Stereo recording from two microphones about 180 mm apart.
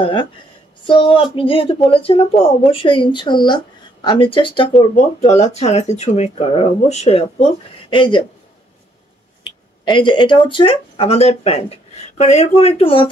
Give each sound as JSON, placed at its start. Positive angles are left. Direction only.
{"t": 0.0, "sound": "speech", "side_deg": 25}
{"t": 4.9, "sound": "speech", "side_deg": 40}
{"t": 9.4, "sound": "speech", "side_deg": 25}